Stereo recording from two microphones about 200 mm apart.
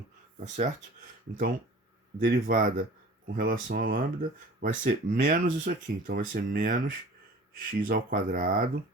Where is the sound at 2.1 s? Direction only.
50° right (ahead or behind).